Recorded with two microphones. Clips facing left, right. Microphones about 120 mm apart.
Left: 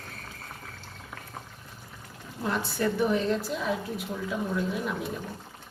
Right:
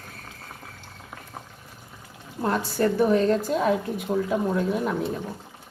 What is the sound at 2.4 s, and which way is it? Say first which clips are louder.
A woman's voice: right 5 dB; 45° right (ahead or behind).